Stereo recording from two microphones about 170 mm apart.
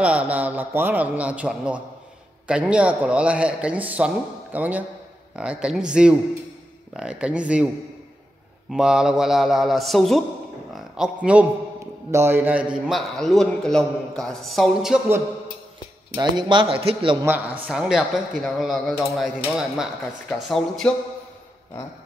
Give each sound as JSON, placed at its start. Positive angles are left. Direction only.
{"t": 0.0, "sound": "a man's voice", "side_deg": -5}
{"t": 8.6, "sound": "a man's voice", "side_deg": -5}
{"t": 16.2, "sound": "speech", "side_deg": -25}
{"t": 17.6, "sound": "a man's voice", "side_deg": -5}